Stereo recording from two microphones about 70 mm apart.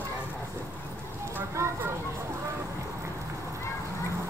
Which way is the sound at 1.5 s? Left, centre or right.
Right.